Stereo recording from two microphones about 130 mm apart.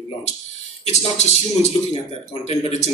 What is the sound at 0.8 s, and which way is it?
Speech, 55° left (ahead or behind).